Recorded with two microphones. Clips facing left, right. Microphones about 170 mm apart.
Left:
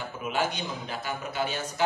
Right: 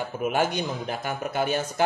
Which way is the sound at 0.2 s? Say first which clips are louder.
Right 5 dB; 50° right (ahead or behind).